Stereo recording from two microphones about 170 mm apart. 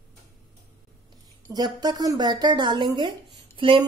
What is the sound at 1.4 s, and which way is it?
A woman's voice, 25° right (ahead or behind).